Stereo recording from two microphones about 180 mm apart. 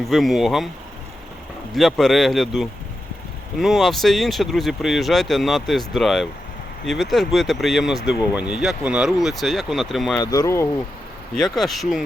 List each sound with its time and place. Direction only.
0.0 s speech: centre (ahead or behind)
1.7 s speech: centre (ahead or behind)
10.2 s speech: 20° left (ahead or behind)
11.6 s speech: centre (ahead or behind)